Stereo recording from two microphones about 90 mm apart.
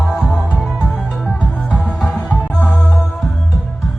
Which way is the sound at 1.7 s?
10° left (ahead or behind).